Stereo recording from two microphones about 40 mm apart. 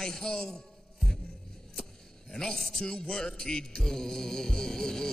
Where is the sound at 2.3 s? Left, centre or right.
Centre.